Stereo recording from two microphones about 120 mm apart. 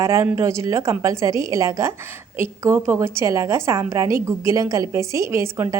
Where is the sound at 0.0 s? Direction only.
25° right (ahead or behind).